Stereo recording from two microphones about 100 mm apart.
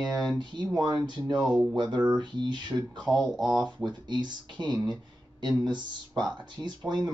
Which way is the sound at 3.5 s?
45° right (ahead or behind).